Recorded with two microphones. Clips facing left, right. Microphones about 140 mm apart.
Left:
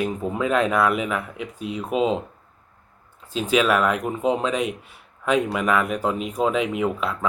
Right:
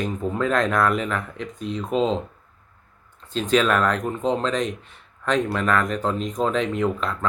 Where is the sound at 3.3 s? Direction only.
10° left (ahead or behind).